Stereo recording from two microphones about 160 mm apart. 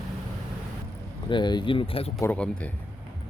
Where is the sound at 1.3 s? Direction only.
30° left (ahead or behind).